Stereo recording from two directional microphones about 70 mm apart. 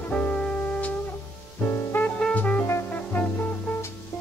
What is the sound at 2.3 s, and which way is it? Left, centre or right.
Brass instrument, left.